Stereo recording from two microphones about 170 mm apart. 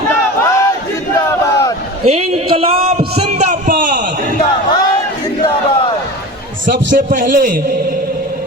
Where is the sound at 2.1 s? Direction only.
35° right (ahead or behind); by 4.0 s 50° right (ahead or behind).